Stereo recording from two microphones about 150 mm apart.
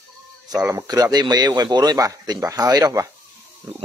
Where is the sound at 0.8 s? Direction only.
25° right (ahead or behind).